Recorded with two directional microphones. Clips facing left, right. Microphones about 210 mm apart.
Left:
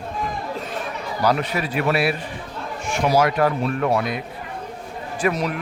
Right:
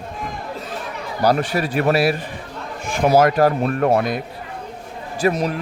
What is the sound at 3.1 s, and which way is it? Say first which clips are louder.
Speech: right 4 dB; 40° right (ahead or behind).